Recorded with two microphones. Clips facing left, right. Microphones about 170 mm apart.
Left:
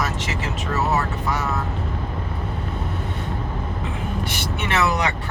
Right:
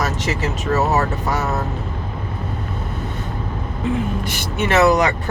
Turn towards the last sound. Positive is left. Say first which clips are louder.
# right 7 dB
turn(degrees=-40)  # may be behind; listen again after turning